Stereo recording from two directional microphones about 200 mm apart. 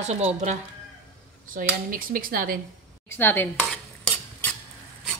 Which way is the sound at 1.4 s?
45° right (ahead or behind).